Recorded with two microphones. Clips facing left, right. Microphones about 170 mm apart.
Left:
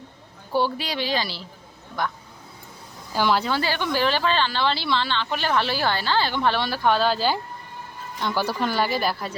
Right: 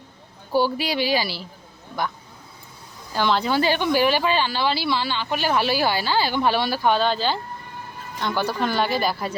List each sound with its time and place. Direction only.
0.5 s speech: 5° right (ahead or behind)
3.2 s speech: 5° left (ahead or behind)
3.4 s speech: 15° right (ahead or behind); by 9.1 s 5° left (ahead or behind)